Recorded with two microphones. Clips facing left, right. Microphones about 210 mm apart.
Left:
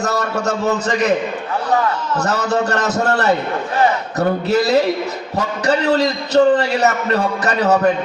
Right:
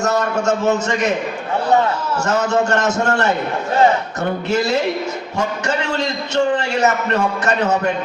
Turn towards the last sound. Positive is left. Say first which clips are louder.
# left 3 dB
turn(degrees=35)  # may be behind; listen again after turning